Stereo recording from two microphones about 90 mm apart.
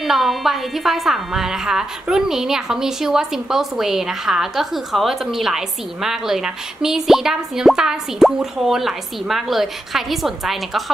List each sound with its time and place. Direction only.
0.0 s a woman's voice: centre (ahead or behind)